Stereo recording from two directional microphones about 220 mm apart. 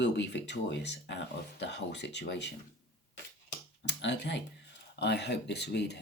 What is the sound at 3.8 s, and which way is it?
Speech, 50° left (ahead or behind).